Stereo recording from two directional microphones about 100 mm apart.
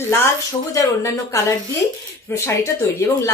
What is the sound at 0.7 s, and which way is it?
A woman's voice, 35° left (ahead or behind).